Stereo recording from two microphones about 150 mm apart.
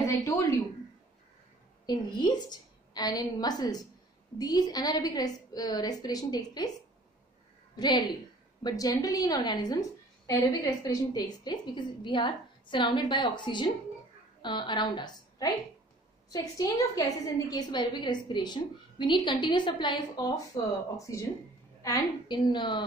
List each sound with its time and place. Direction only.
0.0 s speech: 20° left (ahead or behind)
1.9 s a woman's voice: 30° left (ahead or behind)
7.7 s a woman's voice: 30° left (ahead or behind)